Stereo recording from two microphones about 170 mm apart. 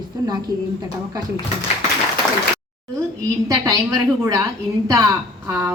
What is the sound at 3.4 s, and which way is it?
A woman's voice, 20° right (ahead or behind).